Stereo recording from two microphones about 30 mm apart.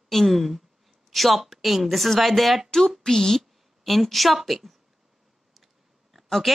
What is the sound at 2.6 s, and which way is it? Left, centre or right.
A woman's voice, centre.